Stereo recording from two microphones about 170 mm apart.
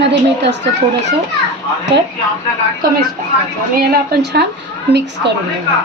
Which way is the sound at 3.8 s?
75° right (ahead or behind).